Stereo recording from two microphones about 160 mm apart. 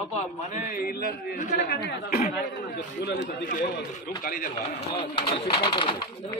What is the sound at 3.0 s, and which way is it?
Speech, 90° left.